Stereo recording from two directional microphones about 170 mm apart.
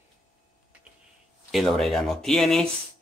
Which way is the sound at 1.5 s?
Centre (ahead or behind).